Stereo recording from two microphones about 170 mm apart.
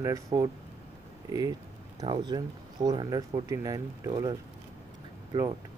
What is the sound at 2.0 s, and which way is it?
Speech, 25° right (ahead or behind).